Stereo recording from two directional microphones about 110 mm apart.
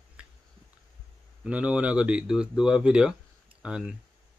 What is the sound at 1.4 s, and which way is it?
Speech, 10° right (ahead or behind).